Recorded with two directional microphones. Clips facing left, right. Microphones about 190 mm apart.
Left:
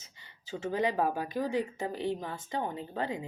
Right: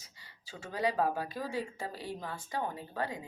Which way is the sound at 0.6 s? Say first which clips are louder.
Left 2 dB; 20° left (ahead or behind).